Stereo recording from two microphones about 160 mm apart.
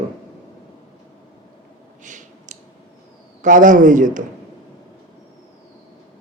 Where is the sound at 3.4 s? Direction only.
55° right (ahead or behind).